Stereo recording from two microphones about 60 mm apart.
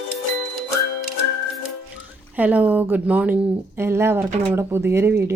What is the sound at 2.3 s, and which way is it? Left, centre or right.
Speech, right.